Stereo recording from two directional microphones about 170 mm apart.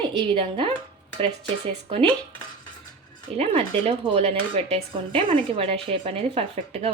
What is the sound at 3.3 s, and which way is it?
A woman's voice, 35° right (ahead or behind).